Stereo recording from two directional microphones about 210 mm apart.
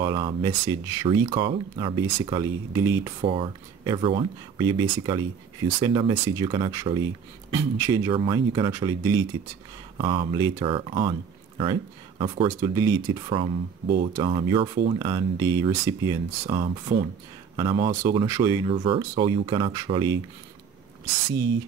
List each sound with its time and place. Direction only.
0.0 s speech: 20° right (ahead or behind)